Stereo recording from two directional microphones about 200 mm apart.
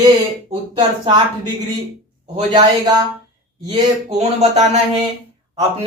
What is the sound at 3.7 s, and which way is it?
Speech, 30° right (ahead or behind).